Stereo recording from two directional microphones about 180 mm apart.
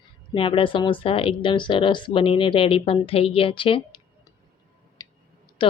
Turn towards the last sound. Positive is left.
turn(degrees=30)  # may be behind; listen again after turning